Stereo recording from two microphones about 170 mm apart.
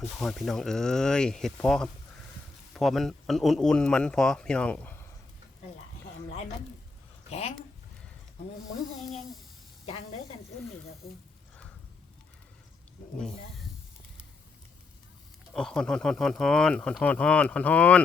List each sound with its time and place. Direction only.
0.2 s speech: centre (ahead or behind)
7.3 s speech: 40° left (ahead or behind)
15.5 s speech: 5° left (ahead or behind)